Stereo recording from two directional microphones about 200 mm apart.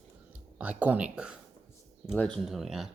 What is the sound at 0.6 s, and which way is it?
Speech, 5° right (ahead or behind).